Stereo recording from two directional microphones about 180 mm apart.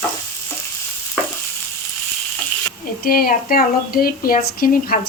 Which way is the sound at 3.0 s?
55° left (ahead or behind).